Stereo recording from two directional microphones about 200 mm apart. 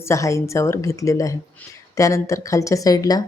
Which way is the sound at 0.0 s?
15° left (ahead or behind).